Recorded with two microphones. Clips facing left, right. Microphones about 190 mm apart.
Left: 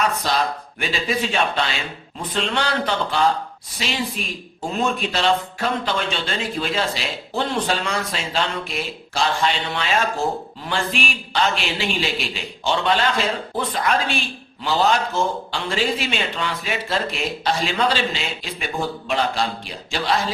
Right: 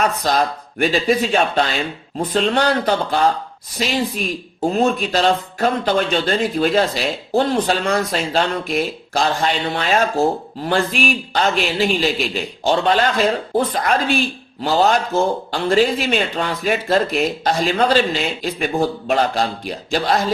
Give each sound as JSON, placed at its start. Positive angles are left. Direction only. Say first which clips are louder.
{"t": 0.0, "sound": "speech", "louder": "right 3 dB", "side_deg": -45}